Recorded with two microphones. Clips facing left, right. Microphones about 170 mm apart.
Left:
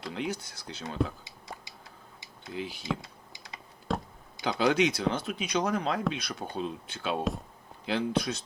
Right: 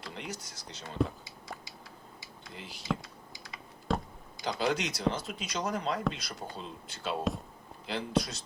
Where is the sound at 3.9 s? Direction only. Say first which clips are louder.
Even; centre (ahead or behind).